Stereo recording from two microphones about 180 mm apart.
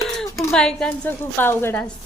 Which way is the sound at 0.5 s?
5° left (ahead or behind).